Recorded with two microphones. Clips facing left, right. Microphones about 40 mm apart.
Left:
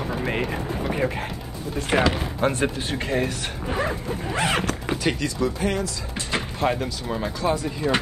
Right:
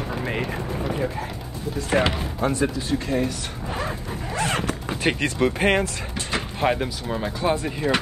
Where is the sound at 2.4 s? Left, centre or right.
Left.